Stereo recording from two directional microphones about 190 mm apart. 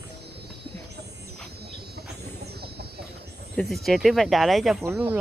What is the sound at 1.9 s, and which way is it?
Music, 55° right (ahead or behind).